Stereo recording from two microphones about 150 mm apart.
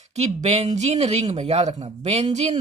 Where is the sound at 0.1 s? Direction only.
50° right (ahead or behind).